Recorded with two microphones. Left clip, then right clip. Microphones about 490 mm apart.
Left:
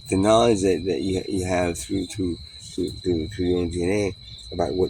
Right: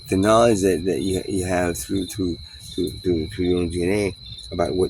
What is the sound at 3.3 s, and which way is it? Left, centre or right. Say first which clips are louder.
Speech: right 2 dB; right.